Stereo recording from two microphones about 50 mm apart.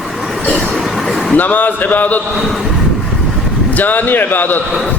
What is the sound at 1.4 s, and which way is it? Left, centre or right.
Speech, left.